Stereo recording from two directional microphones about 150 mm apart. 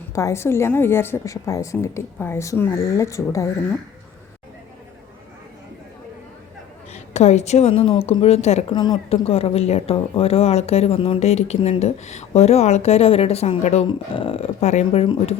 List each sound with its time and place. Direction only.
0.1 s a woman's voice: 20° left (ahead or behind)
6.9 s speech: 50° left (ahead or behind)
8.7 s a woman's voice: 30° left (ahead or behind)
9.0 s speech: 40° left (ahead or behind)
14.1 s speech: 35° left (ahead or behind)
15.0 s speech: 35° left (ahead or behind)